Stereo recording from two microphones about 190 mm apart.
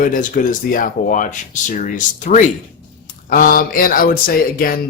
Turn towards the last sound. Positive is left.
turn(degrees=50)  # may be behind; listen again after turning